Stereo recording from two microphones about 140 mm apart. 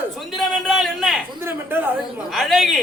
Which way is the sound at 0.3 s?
Centre (ahead or behind).